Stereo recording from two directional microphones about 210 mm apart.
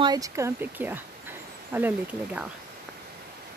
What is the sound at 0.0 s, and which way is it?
Speech, 15° right (ahead or behind).